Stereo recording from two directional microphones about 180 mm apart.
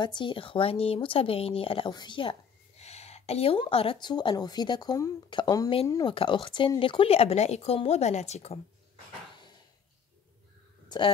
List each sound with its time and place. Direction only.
0.0 s speech: 25° left (ahead or behind)
10.9 s speech: 25° left (ahead or behind)